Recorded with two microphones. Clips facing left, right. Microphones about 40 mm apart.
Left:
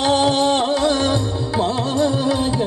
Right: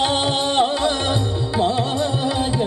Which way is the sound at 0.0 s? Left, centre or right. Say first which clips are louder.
Left 4 dB; right.